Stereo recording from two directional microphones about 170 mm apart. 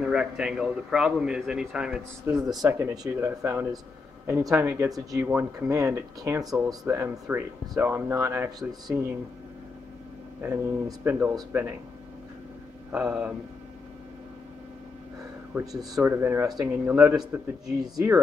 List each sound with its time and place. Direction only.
0.0 s a man's voice: 5° right (ahead or behind)
2.6 s speech: 20° right (ahead or behind)
10.4 s speech: 15° right (ahead or behind)
12.9 s a man's voice: 5° right (ahead or behind)
15.6 s a man's voice: centre (ahead or behind)
15.9 s speech: 15° right (ahead or behind)
17.1 s a man's voice: 5° right (ahead or behind)
17.9 s speech: 15° right (ahead or behind)